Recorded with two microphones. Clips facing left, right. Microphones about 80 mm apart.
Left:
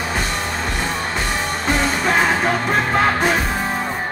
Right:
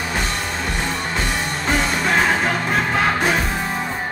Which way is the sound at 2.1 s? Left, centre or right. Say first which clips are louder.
Left 1 dB; centre.